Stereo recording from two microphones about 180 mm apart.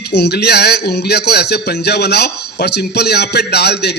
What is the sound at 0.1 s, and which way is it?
Speech, 65° left (ahead or behind).